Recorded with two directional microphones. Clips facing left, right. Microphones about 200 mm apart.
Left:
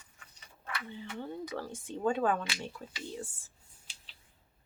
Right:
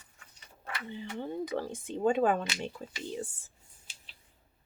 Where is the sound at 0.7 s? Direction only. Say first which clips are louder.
Right 3 dB; 20° right (ahead or behind).